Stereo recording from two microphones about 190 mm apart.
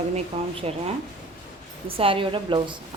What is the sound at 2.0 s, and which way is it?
Speech, 30° right (ahead or behind).